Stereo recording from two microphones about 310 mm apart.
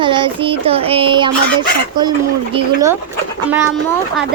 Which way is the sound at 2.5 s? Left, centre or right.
Centre.